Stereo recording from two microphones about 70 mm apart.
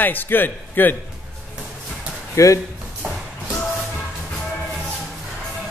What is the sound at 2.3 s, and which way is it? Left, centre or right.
Speech, left.